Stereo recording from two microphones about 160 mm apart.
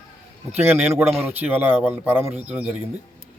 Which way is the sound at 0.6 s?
15° right (ahead or behind).